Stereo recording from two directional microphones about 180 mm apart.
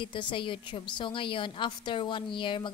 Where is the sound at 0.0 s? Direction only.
25° left (ahead or behind).